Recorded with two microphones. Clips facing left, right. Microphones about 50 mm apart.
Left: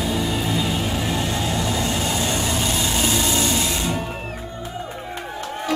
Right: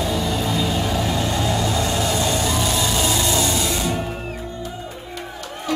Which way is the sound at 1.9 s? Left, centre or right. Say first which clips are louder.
Right 2 dB; left.